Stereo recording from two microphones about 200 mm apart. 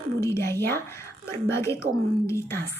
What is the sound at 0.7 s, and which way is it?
A woman's voice, 10° left (ahead or behind).